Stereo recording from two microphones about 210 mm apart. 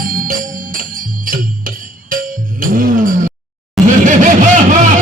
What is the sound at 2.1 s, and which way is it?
Music, 40° right (ahead or behind).